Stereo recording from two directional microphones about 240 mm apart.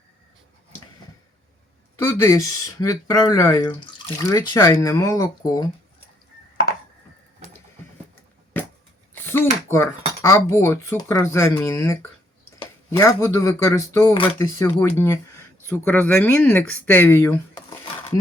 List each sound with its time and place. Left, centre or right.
2.0 s speech: centre
9.2 s speech: centre